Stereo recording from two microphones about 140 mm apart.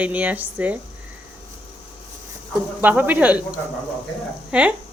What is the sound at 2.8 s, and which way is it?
Speech, 10° right (ahead or behind).